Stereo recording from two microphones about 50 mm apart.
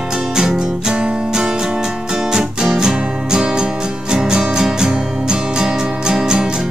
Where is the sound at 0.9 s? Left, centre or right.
Right.